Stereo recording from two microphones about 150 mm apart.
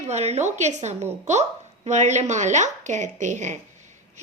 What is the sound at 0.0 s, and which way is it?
A woman's voice, 45° right (ahead or behind).